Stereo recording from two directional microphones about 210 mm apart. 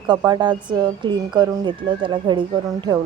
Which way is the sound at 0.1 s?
20° right (ahead or behind).